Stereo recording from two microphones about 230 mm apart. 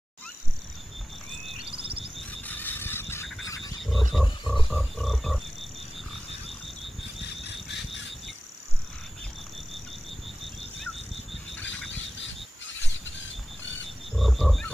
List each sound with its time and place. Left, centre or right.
1.6 s frog: right
2.4 s neigh: centre
3.8 s a sound: centre
4.6 s frog: centre
14.1 s frog: centre